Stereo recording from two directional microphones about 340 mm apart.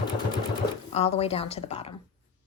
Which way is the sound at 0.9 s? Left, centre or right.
Centre.